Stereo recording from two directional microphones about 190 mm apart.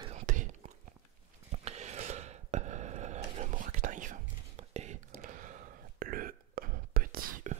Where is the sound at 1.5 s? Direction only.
35° right (ahead or behind).